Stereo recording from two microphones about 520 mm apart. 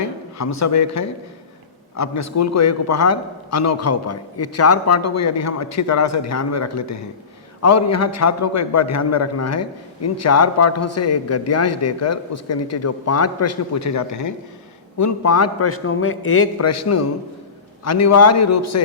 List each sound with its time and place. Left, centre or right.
0.3 s a man's voice: left